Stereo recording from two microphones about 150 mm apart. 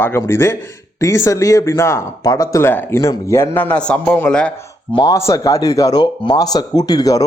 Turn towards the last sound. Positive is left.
turn(degrees=25)  # may be behind; listen again after turning